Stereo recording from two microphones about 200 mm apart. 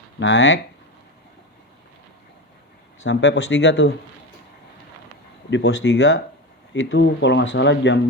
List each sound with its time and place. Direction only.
0.2 s speech: 65° left (ahead or behind)
3.0 s speech: 65° left (ahead or behind)
5.5 s speech: 65° left (ahead or behind)